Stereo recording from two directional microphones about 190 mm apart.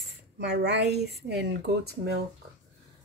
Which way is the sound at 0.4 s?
60° right (ahead or behind).